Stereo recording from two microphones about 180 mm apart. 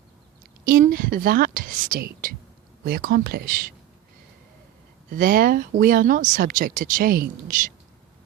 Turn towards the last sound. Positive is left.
turn(degrees=-55)  # may be behind; listen again after turning